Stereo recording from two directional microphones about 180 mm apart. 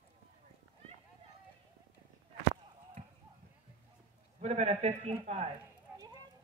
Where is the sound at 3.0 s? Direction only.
40° right (ahead or behind).